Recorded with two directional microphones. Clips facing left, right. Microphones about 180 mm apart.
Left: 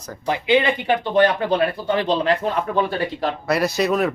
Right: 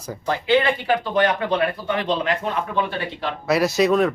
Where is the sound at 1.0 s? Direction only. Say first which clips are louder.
Left 3 dB; 30° left (ahead or behind).